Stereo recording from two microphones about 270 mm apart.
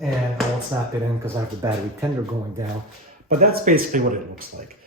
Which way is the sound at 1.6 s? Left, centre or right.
Centre.